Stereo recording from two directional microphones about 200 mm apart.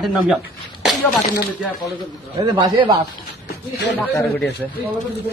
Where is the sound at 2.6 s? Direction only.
20° right (ahead or behind).